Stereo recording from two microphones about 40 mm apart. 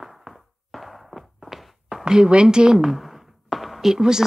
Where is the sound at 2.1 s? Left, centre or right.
Right.